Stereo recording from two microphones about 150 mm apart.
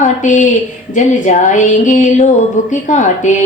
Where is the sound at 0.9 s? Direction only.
55° left (ahead or behind).